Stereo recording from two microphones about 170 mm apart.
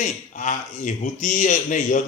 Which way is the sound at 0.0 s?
45° left (ahead or behind).